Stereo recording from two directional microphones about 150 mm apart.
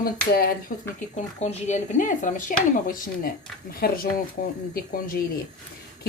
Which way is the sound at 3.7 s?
85° left.